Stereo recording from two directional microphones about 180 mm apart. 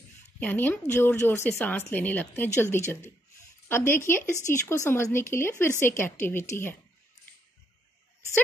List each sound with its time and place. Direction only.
0.4 s a woman's voice: 10° left (ahead or behind)